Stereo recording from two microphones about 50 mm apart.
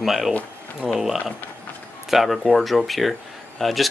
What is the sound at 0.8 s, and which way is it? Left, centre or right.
Speech, centre.